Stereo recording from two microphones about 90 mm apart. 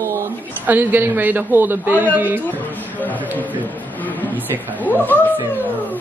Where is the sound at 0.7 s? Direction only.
20° right (ahead or behind).